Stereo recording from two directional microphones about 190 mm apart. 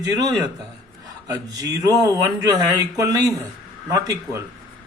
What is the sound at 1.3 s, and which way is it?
Speech, 20° right (ahead or behind).